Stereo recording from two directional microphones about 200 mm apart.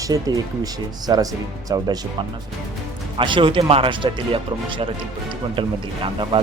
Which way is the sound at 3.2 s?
25° right (ahead or behind).